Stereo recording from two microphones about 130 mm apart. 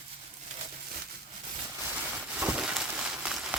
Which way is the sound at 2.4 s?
5° right (ahead or behind).